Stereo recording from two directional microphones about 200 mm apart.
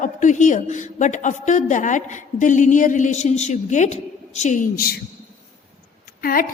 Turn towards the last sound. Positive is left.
turn(degrees=45)  # may be behind; listen again after turning